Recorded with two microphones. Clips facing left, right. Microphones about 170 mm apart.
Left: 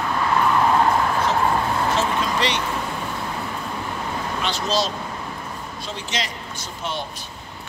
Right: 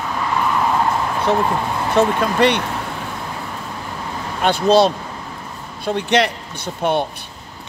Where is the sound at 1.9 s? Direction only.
60° right (ahead or behind).